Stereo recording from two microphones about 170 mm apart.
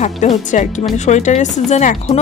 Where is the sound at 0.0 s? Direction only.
45° left (ahead or behind).